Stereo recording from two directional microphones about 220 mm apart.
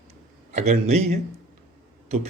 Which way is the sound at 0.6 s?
30° right (ahead or behind).